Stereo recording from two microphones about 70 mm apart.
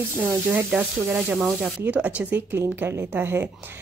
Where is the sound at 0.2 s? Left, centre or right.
Right.